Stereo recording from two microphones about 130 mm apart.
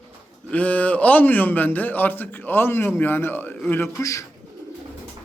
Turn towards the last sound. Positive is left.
turn(degrees=25)  # may be behind; listen again after turning